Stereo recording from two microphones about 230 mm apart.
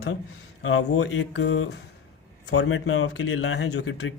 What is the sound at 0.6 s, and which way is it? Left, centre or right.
Speech, left.